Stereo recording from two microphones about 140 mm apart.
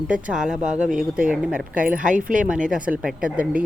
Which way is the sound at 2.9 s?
5° right (ahead or behind).